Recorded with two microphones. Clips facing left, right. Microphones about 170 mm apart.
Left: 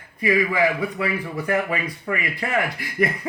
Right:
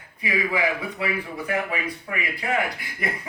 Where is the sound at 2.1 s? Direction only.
60° left (ahead or behind).